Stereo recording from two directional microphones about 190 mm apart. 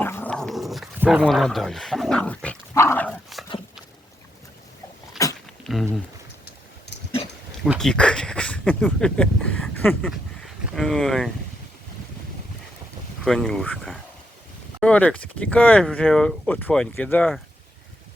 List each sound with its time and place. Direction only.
0.0 s dog: 10° left (ahead or behind); by 1.2 s 10° right (ahead or behind)
1.2 s dog: centre (ahead or behind)
5.2 s a sound: 20° left (ahead or behind)
5.6 s a sound: centre (ahead or behind)
7.6 s speech: centre (ahead or behind)
13.2 s speech: centre (ahead or behind)